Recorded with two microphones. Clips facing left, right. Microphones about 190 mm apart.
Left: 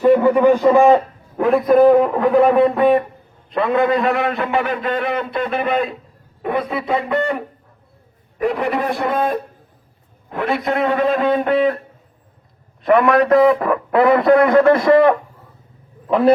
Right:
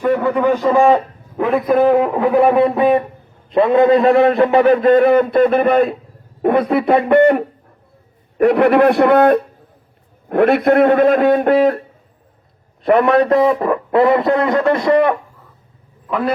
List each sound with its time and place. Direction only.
0.0 s a sound: 25° left (ahead or behind)
0.3 s a man's voice: 10° left (ahead or behind)
1.4 s a man's voice: centre (ahead or behind)
3.5 s a man's voice: 25° right (ahead or behind); by 9.4 s 70° right (ahead or behind)
10.2 s a man's voice: 60° right (ahead or behind)
12.8 s a man's voice: 30° right (ahead or behind)